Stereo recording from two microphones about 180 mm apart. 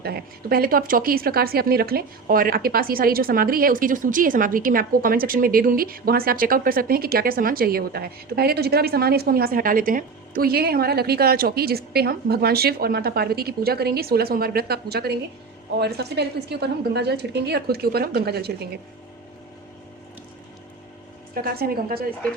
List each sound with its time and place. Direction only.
0.0 s speech: 60° right (ahead or behind)
21.3 s speech: 55° right (ahead or behind)